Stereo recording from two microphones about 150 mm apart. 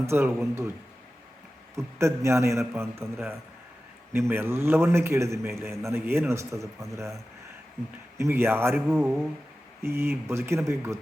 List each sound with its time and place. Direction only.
0.0 s a man's voice: 15° right (ahead or behind)
1.7 s a man's voice: 20° right (ahead or behind)
8.2 s a man's voice: 15° right (ahead or behind)